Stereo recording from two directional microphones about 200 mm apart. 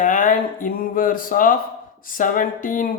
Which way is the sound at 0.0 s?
40° left (ahead or behind).